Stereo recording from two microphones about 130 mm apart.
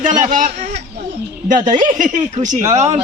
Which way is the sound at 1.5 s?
85° right.